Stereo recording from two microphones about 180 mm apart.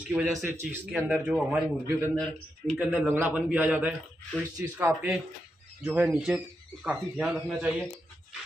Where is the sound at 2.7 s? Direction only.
10° right (ahead or behind).